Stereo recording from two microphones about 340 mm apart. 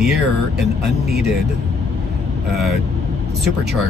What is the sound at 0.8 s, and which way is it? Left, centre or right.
Speech, right.